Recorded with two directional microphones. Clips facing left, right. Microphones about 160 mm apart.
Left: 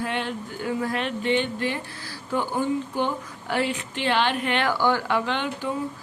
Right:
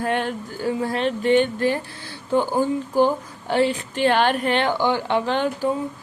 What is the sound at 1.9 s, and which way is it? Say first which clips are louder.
Speech: right 6 dB; 25° right (ahead or behind).